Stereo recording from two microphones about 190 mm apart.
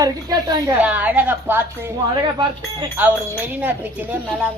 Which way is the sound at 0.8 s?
10° right (ahead or behind).